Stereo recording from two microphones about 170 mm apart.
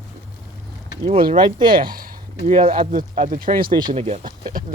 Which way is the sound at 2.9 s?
55° right (ahead or behind).